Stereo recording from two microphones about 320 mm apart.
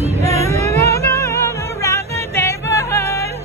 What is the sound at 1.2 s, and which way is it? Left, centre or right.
Music, centre.